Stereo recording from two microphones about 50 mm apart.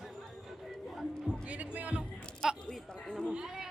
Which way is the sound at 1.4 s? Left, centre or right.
Right.